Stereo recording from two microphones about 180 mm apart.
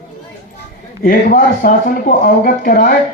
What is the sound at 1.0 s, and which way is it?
Speech, 50° left (ahead or behind).